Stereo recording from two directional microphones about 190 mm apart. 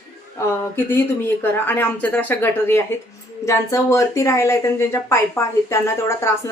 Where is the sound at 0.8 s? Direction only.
10° left (ahead or behind).